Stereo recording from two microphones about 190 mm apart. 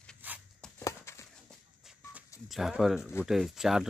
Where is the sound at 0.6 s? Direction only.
15° left (ahead or behind).